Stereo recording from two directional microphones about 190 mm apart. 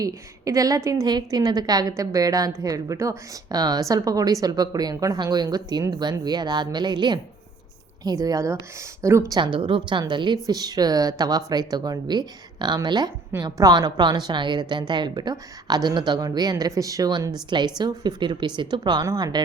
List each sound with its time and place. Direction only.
0.0 s a woman's voice: 20° right (ahead or behind)